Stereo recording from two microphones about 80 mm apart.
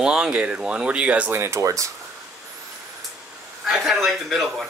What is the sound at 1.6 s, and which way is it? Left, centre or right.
Speech, right.